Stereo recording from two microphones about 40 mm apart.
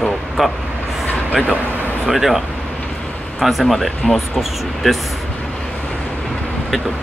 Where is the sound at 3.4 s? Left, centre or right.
Centre.